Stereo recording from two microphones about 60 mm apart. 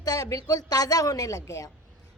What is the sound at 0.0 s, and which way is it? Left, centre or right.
A woman's voice, left.